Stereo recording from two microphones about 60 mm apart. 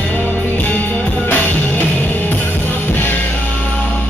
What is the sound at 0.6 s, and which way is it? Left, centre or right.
Music, left.